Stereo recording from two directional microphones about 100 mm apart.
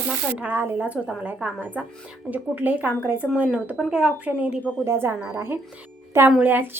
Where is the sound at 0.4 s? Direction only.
20° right (ahead or behind).